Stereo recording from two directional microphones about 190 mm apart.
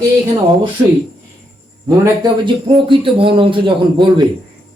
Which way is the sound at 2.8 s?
25° right (ahead or behind).